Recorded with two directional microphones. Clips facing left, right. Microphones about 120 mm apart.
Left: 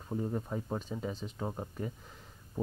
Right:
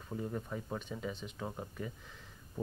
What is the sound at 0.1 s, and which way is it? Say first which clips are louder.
Speech: left 4 dB; 25° left (ahead or behind).